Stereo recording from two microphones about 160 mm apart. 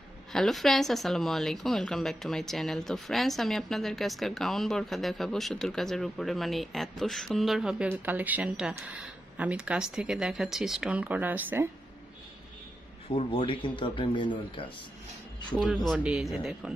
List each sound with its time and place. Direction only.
0.3 s speech: centre (ahead or behind)
13.1 s speech: 35° left (ahead or behind)
15.6 s speech: centre (ahead or behind)